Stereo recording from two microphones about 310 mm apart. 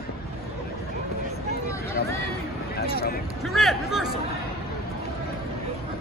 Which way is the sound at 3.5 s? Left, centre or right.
Centre.